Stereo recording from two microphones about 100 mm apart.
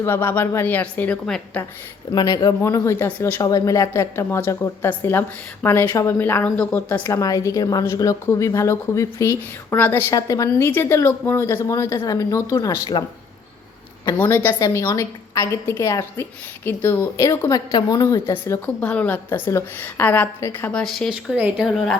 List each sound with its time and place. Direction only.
0.0 s a woman's voice: 25° left (ahead or behind)
2.1 s speech: 45° left (ahead or behind)
2.6 s a woman's voice: 30° left (ahead or behind)
3.4 s a woman's voice: 35° left (ahead or behind); by 7.1 s 20° left (ahead or behind)
7.1 s a woman's voice: 35° left (ahead or behind)
10.2 s a woman's voice: 35° left (ahead or behind)
10.7 s a woman's voice: 25° left (ahead or behind); by 13.1 s 45° left (ahead or behind)
14.2 s a woman's voice: 25° left (ahead or behind)
18.6 s a woman's voice: 15° left (ahead or behind)
20.7 s a woman's voice: 10° left (ahead or behind)
21.3 s speech: 10° right (ahead or behind)